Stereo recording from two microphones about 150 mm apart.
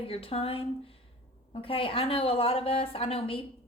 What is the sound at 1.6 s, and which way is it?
A woman's voice, 40° left (ahead or behind).